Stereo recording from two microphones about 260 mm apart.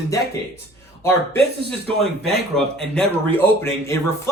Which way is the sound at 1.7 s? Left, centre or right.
Centre.